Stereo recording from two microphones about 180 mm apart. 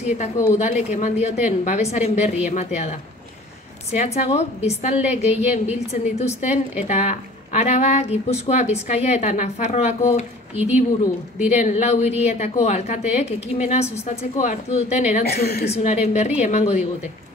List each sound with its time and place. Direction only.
0.0 s speech: 40° left (ahead or behind)
10.5 s a woman's voice: 10° right (ahead or behind)
11.3 s speech: 40° left (ahead or behind)
15.2 s a woman's voice: 60° left (ahead or behind)
15.7 s speech: 40° left (ahead or behind)